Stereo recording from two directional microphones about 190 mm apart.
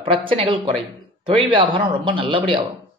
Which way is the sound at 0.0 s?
25° right (ahead or behind).